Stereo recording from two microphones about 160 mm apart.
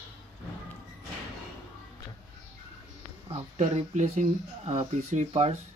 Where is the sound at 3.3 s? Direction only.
45° right (ahead or behind).